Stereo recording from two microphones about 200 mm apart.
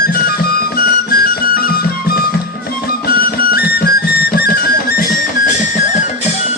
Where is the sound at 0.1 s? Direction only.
50° left (ahead or behind).